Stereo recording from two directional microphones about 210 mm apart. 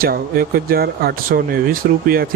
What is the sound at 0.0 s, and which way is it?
Speech, 45° right (ahead or behind).